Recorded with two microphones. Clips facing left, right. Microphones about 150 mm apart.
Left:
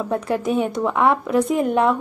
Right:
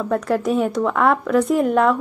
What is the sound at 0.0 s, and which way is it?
Speech, 5° left (ahead or behind).